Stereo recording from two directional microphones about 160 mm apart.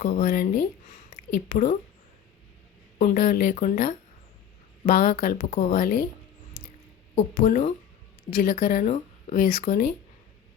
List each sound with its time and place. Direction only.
0.0 s a woman's voice: 55° left (ahead or behind)
3.0 s speech: 60° left (ahead or behind); by 5.7 s 45° left (ahead or behind)
5.7 s speech: 70° left (ahead or behind)
7.2 s speech: 55° left (ahead or behind)
8.3 s speech: 65° left (ahead or behind)